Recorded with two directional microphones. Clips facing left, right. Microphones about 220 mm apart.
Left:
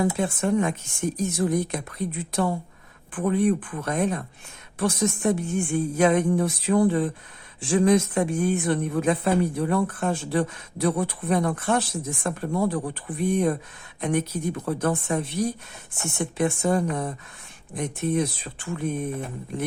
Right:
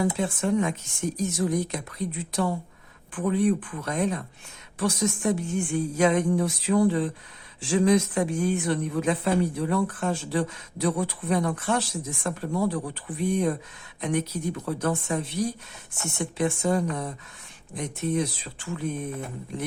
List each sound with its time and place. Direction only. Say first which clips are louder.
0.0 s a woman's voice: left 2 dB; 55° left (ahead or behind)